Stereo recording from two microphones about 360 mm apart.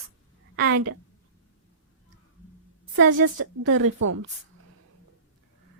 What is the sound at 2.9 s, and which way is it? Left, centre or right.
A woman's voice, right.